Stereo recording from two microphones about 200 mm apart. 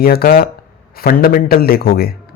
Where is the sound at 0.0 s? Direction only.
50° left (ahead or behind).